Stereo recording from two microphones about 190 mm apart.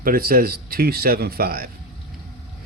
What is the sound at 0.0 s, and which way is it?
A man's voice, 50° right (ahead or behind).